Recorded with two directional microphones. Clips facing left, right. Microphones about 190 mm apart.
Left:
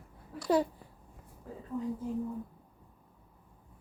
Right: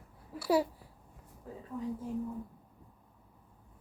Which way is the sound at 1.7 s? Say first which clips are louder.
Left 3 dB; centre (ahead or behind).